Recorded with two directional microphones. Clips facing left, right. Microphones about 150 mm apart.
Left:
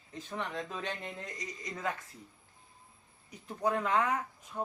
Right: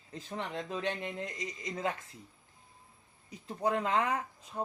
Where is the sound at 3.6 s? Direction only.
25° right (ahead or behind).